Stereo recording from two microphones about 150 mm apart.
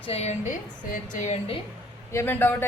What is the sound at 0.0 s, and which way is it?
A woman's voice, 45° left (ahead or behind).